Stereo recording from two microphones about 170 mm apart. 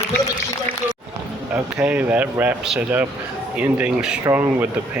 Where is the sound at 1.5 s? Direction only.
5° right (ahead or behind).